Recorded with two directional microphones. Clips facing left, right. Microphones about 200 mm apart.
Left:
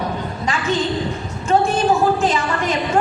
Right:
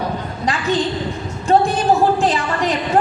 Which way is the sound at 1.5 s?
35° right (ahead or behind).